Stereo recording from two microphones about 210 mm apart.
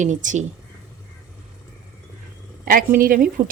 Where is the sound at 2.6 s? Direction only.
40° right (ahead or behind).